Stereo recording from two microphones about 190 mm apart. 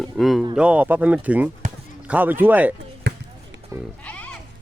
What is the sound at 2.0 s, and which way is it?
Speech, 10° right (ahead or behind).